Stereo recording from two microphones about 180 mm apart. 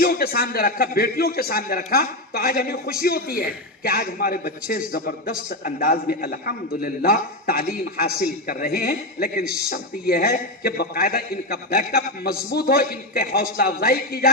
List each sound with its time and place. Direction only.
0.0 s a man's voice: 55° left (ahead or behind)